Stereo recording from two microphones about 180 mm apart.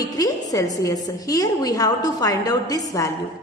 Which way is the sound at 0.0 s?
20° left (ahead or behind).